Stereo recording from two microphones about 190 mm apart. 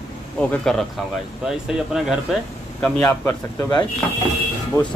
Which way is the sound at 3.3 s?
20° left (ahead or behind).